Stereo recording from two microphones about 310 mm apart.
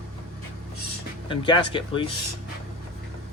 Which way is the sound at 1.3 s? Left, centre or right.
Centre.